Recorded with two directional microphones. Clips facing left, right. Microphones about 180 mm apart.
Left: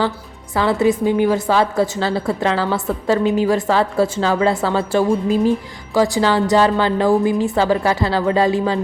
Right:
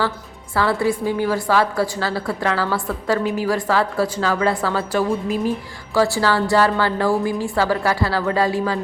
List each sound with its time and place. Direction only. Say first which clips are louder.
0.5 s a woman's voice: left 3 dB; 20° left (ahead or behind)